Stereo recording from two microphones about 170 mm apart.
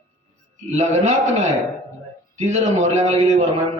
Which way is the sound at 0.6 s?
40° right (ahead or behind).